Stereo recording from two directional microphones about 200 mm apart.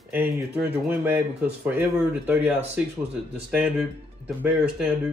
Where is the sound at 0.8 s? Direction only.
10° right (ahead or behind).